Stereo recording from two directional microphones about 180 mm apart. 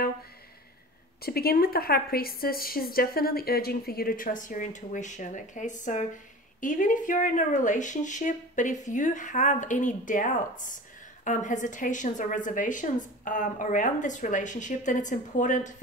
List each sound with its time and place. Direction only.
1.2 s a woman's voice: 60° left (ahead or behind)